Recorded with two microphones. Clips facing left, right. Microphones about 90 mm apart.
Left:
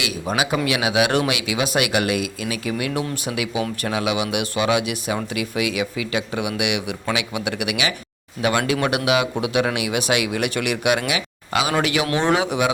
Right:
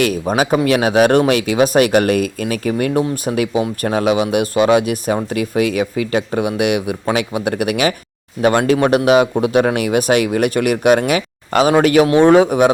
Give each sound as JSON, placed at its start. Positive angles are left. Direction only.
{"t": 0.0, "sound": "speech", "side_deg": -45}
{"t": 12.0, "sound": "a man's voice", "side_deg": -20}
{"t": 12.3, "sound": "speech", "side_deg": -45}